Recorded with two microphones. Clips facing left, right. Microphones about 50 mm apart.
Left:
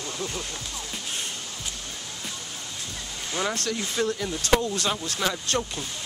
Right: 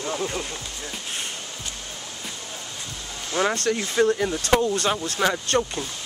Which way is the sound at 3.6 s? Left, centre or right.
Right.